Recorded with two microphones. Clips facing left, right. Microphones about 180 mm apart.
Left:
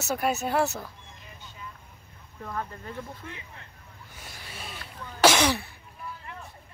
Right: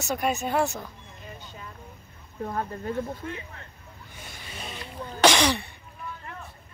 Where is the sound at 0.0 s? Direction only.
5° left (ahead or behind).